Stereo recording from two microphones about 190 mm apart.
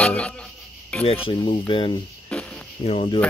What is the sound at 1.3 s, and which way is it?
Speech, 25° left (ahead or behind).